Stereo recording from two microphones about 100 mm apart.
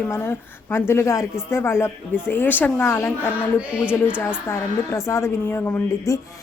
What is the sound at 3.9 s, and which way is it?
Speech, 10° right (ahead or behind).